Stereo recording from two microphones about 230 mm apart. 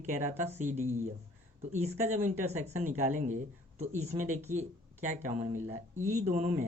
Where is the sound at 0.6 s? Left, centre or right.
Right.